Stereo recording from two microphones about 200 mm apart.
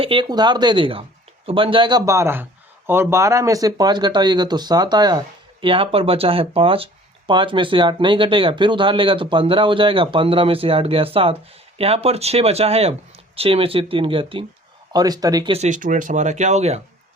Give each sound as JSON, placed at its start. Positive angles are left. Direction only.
{"t": 0.0, "sound": "speech", "side_deg": -25}
{"t": 15.5, "sound": "speech", "side_deg": -35}